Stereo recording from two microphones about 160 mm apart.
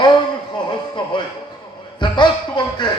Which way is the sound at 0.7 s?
30° left (ahead or behind).